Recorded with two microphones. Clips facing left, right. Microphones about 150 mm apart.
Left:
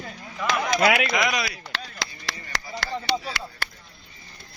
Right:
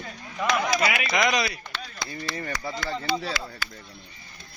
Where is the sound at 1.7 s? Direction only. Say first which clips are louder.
Left 1 dB; 90° left.